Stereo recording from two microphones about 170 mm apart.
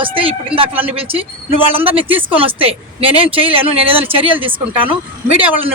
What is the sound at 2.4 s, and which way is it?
Speech, 35° right (ahead or behind).